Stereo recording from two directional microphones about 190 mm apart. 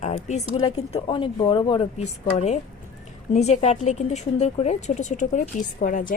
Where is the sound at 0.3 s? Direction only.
35° left (ahead or behind).